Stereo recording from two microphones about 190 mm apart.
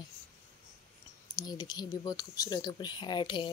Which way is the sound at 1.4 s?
20° left (ahead or behind).